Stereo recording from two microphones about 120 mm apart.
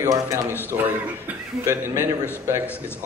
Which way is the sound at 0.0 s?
25° right (ahead or behind).